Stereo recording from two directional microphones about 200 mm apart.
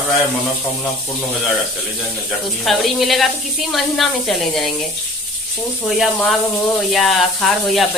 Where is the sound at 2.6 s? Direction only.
Centre (ahead or behind).